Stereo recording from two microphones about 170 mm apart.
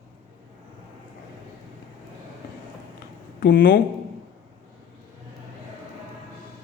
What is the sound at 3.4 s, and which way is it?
Speech, 60° left (ahead or behind).